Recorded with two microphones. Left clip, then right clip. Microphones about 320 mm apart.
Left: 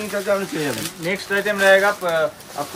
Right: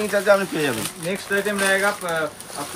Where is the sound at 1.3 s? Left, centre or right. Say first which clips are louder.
Left 5 dB; left.